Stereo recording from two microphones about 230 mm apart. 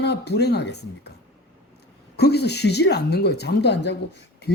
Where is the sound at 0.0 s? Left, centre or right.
Left.